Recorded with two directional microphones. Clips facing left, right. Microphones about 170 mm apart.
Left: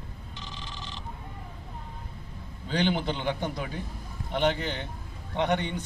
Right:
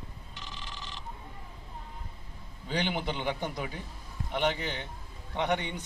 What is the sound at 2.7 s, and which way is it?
A man's voice, 5° right (ahead or behind).